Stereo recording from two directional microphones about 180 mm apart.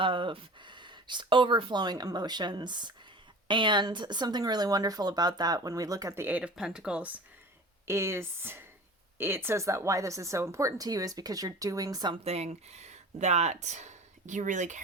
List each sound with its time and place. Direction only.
0.0 s speech: 30° right (ahead or behind)
12.2 s speech: 35° right (ahead or behind)